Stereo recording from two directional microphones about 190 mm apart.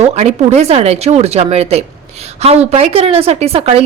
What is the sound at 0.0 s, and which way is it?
Speech, 35° right (ahead or behind).